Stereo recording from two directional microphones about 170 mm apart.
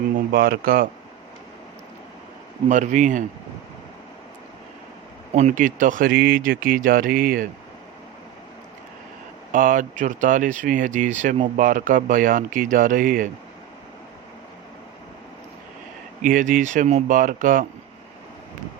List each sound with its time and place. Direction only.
0.3 s speech: 65° right (ahead or behind)
2.6 s speech: 45° right (ahead or behind)
5.3 s speech: 45° right (ahead or behind)
9.5 s speech: 50° right (ahead or behind)
16.2 s speech: 50° right (ahead or behind)